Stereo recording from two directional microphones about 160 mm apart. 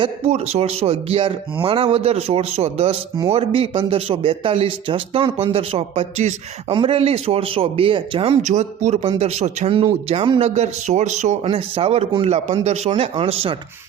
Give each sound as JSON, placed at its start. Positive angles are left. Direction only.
{"t": 0.3, "sound": "speech", "side_deg": -40}
{"t": 10.5, "sound": "speech", "side_deg": -45}